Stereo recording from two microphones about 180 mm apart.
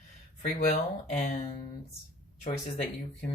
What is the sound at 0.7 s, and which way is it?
Speech, 40° left (ahead or behind).